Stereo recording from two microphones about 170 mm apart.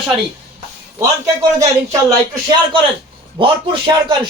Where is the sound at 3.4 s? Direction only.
30° right (ahead or behind).